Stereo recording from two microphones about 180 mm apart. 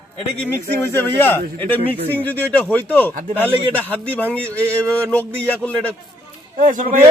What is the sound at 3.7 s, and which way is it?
A man's voice, 10° left (ahead or behind).